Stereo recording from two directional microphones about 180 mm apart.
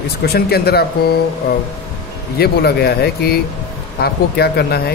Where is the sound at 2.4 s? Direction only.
60° left (ahead or behind).